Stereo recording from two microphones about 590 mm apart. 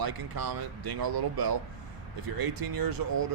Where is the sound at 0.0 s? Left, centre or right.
Right.